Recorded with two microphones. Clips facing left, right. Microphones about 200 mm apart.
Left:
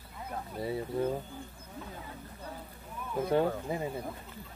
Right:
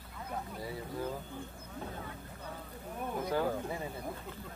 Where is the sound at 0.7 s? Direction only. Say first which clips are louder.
Left 9 dB; 25° left (ahead or behind).